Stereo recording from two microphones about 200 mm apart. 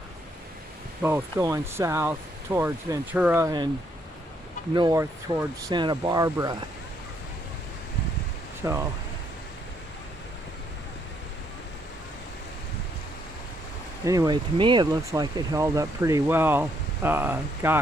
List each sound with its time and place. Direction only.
1.0 s speech: 15° right (ahead or behind)
4.7 s speech: 20° right (ahead or behind)
8.6 s speech: 15° right (ahead or behind)
14.0 s speech: 20° right (ahead or behind)